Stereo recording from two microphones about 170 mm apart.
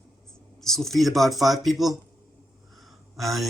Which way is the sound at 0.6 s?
Centre (ahead or behind).